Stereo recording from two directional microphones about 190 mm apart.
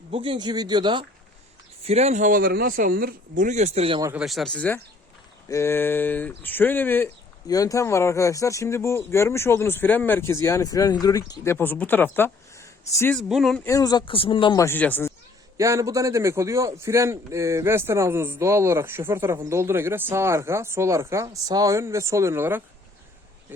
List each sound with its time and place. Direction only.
0.1 s speech: 25° right (ahead or behind)
1.8 s speech: 35° right (ahead or behind)
4.1 s speech: centre (ahead or behind); by 13.1 s 15° left (ahead or behind)
13.1 s speech: centre (ahead or behind)
13.7 s speech: 20° left (ahead or behind)
14.6 s speech: 10° left (ahead or behind)
15.5 s a man's voice: 15° right (ahead or behind)